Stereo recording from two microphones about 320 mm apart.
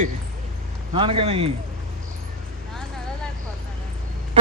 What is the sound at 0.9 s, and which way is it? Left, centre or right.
Speech, centre.